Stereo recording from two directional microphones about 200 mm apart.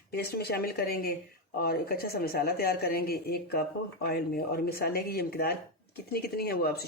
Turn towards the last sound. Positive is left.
turn(degrees=50)  # may be behind; listen again after turning